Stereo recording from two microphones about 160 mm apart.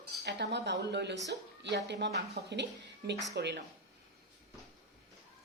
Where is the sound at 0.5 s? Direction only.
90° right.